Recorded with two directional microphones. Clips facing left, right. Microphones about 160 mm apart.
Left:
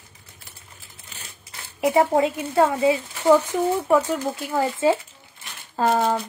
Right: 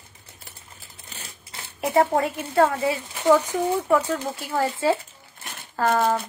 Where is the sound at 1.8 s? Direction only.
20° left (ahead or behind).